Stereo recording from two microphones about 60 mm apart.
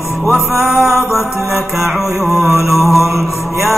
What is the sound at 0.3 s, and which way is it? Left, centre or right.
Music, centre.